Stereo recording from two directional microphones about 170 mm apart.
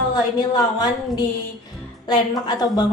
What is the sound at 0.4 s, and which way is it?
A woman's voice, 25° left (ahead or behind).